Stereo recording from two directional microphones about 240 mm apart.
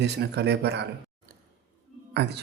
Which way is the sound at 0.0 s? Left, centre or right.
Right.